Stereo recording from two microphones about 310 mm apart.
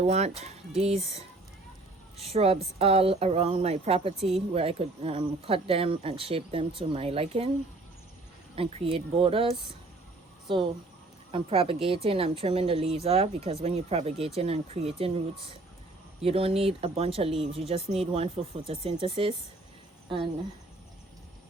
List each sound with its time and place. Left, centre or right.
0.0 s a woman's voice: right
8.5 s a woman's voice: centre
16.2 s a woman's voice: centre